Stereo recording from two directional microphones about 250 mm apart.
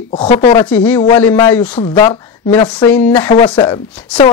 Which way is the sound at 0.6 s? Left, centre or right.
Centre.